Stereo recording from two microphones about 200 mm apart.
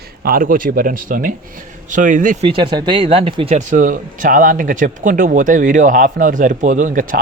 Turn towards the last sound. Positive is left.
turn(degrees=-45)  # may be behind; listen again after turning